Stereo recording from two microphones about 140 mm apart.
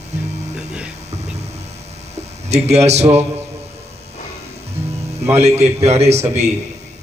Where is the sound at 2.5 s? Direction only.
50° right (ahead or behind).